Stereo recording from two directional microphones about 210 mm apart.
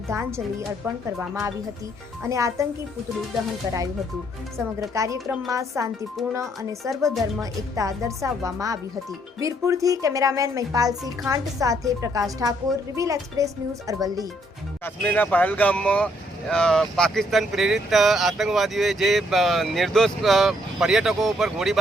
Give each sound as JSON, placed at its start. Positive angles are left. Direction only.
{"t": 0.1, "sound": "a woman's voice", "side_deg": -15}
{"t": 2.2, "sound": "a woman's voice", "side_deg": -15}
{"t": 4.5, "sound": "a woman's voice", "side_deg": -15}
{"t": 6.9, "sound": "speech", "side_deg": 0}
{"t": 7.8, "sound": "a woman's voice", "side_deg": -15}
{"t": 14.8, "sound": "speech", "side_deg": 5}